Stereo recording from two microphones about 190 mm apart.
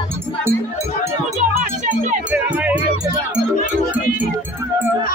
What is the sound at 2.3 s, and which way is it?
Music, 5° right (ahead or behind).